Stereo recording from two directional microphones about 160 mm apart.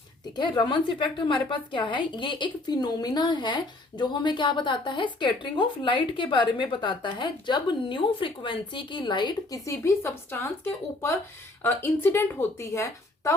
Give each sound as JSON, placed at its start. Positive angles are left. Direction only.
{"t": 0.3, "sound": "a woman's voice", "side_deg": 30}